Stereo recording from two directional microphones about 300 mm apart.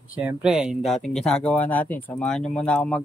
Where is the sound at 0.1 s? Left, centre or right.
Centre.